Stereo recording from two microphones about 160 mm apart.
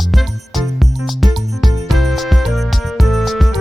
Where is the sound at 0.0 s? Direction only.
Centre (ahead or behind).